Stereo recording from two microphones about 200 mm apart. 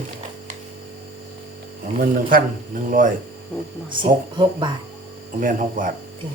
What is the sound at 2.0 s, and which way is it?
Speech, 45° right (ahead or behind).